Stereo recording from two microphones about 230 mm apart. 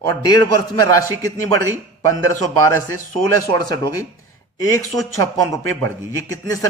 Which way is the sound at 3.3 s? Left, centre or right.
Centre.